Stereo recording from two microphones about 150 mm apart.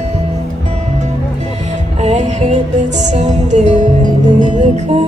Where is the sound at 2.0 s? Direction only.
50° right (ahead or behind).